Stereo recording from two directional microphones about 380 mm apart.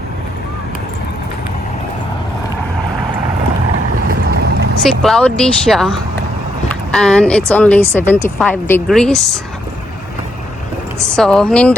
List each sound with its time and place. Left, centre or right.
4.1 s boat: right
4.8 s speech: centre
11.0 s speech: centre